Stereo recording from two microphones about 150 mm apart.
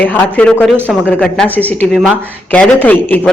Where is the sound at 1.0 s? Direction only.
10° left (ahead or behind).